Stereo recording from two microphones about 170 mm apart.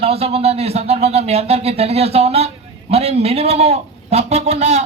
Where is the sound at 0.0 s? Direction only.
35° right (ahead or behind).